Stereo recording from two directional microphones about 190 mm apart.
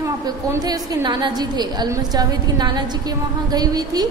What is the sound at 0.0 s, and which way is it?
A woman's voice, 15° right (ahead or behind).